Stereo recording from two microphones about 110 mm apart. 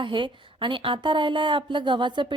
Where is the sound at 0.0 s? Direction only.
50° right (ahead or behind).